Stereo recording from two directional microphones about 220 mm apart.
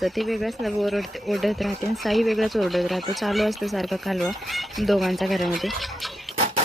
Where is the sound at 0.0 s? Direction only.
Centre (ahead or behind).